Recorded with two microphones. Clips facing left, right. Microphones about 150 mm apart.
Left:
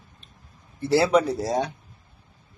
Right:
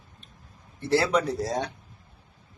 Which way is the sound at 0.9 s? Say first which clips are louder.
Left 4 dB; 5° left (ahead or behind).